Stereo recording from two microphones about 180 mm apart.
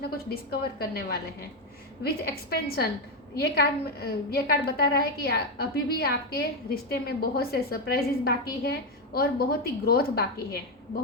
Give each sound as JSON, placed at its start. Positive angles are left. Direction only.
{"t": 0.0, "sound": "a woman's voice", "side_deg": 60}